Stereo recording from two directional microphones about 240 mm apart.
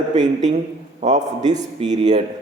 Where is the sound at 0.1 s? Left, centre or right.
Right.